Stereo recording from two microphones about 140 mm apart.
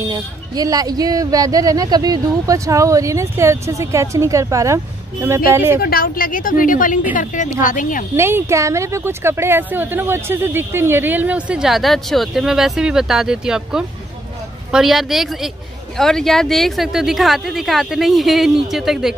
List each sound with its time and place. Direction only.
0.0 s a woman's voice: 25° right (ahead or behind)
5.8 s a woman's voice: 90° left; by 8.0 s 70° left (ahead or behind)
8.2 s a woman's voice: 15° right (ahead or behind)